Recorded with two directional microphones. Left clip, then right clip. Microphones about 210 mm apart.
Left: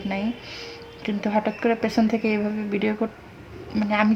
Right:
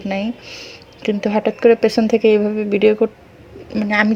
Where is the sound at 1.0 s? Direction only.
10° right (ahead or behind).